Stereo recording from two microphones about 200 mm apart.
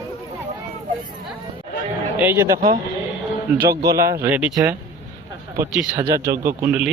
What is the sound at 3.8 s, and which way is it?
Speech, 15° right (ahead or behind).